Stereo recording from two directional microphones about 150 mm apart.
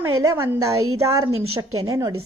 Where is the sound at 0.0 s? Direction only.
20° right (ahead or behind).